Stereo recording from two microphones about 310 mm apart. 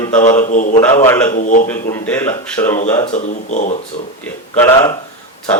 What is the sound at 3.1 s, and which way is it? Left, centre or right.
Speech, left.